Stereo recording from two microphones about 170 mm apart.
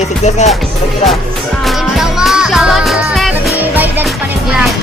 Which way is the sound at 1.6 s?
Centre (ahead or behind).